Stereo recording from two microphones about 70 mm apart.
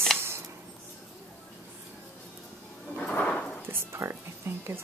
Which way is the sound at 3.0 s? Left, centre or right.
Centre.